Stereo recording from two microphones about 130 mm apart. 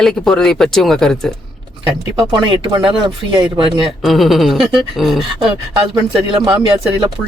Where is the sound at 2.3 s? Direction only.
40° right (ahead or behind).